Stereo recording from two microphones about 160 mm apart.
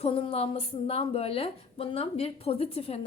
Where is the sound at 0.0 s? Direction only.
35° left (ahead or behind).